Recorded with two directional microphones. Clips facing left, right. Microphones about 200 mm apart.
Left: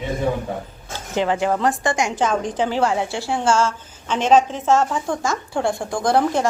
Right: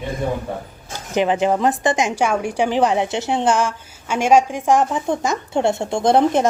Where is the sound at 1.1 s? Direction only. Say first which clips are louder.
Right 3 dB; 20° right (ahead or behind).